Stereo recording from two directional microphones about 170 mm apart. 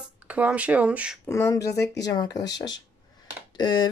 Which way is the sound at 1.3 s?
15° left (ahead or behind).